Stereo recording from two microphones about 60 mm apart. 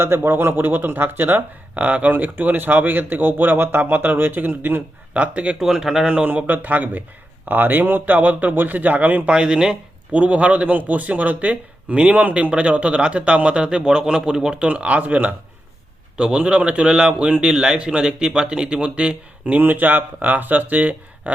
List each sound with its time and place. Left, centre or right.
0.0 s speech: right
5.1 s speech: right
5.5 s a man's voice: centre
6.2 s speech: right
9.3 s speech: centre
16.1 s a man's voice: centre
19.6 s speech: right